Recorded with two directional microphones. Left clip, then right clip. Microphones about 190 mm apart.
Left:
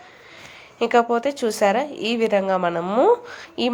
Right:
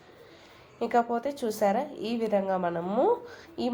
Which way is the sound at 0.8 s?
20° left (ahead or behind).